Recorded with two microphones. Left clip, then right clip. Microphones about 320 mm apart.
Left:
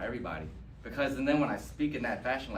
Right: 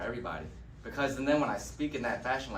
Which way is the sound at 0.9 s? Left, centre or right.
Centre.